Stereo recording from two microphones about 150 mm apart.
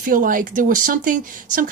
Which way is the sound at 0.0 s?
65° right (ahead or behind).